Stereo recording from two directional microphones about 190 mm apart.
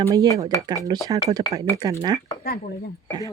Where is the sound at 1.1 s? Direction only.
15° right (ahead or behind).